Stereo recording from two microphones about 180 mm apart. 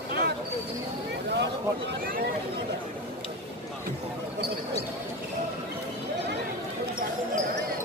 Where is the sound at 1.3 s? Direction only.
70° right (ahead or behind).